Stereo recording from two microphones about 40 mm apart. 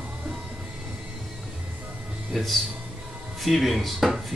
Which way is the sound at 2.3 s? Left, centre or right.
Centre.